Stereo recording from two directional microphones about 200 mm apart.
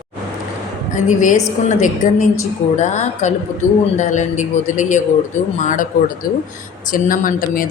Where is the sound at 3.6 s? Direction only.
15° left (ahead or behind).